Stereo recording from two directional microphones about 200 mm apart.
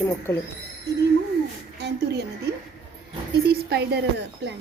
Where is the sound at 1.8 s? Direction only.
55° right (ahead or behind).